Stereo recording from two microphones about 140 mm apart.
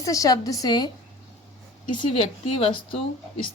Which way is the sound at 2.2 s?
45° left (ahead or behind).